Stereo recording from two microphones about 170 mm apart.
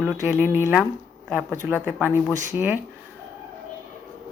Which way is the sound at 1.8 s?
10° right (ahead or behind).